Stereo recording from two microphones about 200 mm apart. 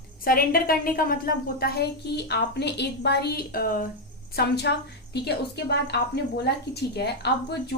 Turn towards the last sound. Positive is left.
turn(degrees=55)  # may be behind; listen again after turning